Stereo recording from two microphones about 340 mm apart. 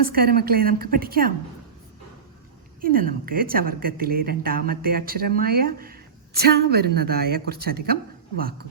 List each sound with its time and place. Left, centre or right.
0.1 s a woman's voice: right
2.8 s a woman's voice: right